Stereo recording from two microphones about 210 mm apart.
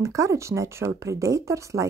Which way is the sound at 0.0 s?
15° right (ahead or behind).